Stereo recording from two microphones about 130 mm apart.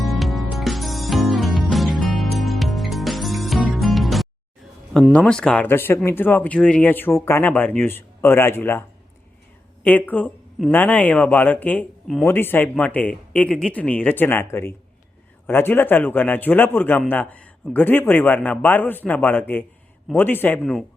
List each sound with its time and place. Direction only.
0.0 s music: centre (ahead or behind)
5.1 s speech: 5° left (ahead or behind)
5.6 s speech: 15° left (ahead or behind)
9.8 s speech: 10° left (ahead or behind)
12.0 s speech: centre (ahead or behind)
12.3 s speech: 15° left (ahead or behind)
20.6 s speech: 5° left (ahead or behind)